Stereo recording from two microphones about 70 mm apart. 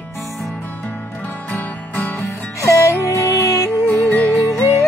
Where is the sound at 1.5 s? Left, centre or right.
Left.